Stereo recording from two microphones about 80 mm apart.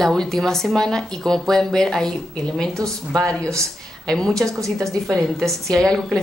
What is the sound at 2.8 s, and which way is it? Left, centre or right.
Speech, right.